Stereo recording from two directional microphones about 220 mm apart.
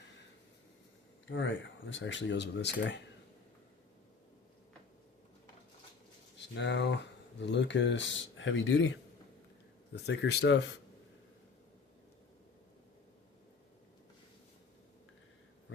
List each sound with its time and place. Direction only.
1.3 s speech: 60° left (ahead or behind)
6.5 s speech: 50° left (ahead or behind)
9.9 s speech: 50° left (ahead or behind)